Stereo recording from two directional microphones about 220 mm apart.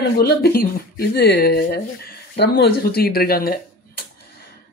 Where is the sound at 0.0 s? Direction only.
45° left (ahead or behind).